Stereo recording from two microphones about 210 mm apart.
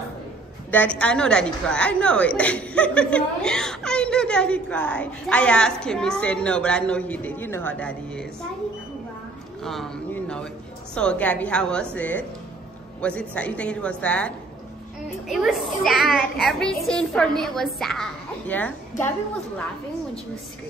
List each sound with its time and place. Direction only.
0.7 s a woman's voice: 5° left (ahead or behind)
9.6 s a woman's voice: centre (ahead or behind)
15.9 s a child's voice: 45° left (ahead or behind)
16.3 s a woman's voice: centre (ahead or behind)